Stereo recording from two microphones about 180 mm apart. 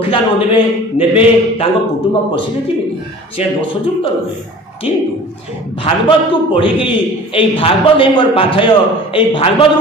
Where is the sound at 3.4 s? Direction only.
35° left (ahead or behind).